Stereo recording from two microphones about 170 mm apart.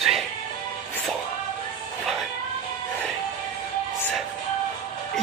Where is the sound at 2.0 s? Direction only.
Centre (ahead or behind).